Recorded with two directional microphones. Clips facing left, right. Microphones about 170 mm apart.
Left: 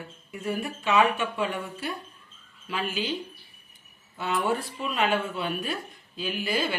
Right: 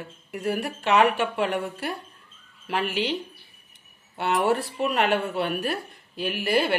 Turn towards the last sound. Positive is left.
turn(degrees=-65)  # may be behind; listen again after turning